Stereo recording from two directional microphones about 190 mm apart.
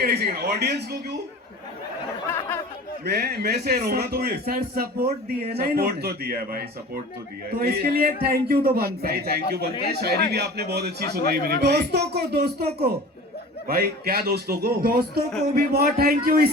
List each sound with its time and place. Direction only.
0.0 s a man's voice: 55° right (ahead or behind)
3.0 s a man's voice: 60° right (ahead or behind)